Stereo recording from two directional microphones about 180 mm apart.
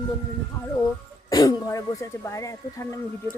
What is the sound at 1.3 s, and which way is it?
Speech, 20° left (ahead or behind).